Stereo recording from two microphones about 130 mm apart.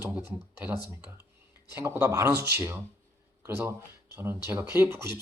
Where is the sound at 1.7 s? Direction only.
15° right (ahead or behind).